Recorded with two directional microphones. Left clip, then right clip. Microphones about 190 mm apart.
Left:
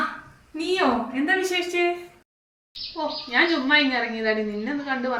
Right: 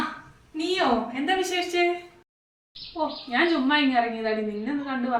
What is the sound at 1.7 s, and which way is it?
Speech, 15° right (ahead or behind).